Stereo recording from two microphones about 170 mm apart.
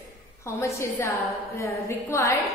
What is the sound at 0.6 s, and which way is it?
A woman's voice, 15° left (ahead or behind).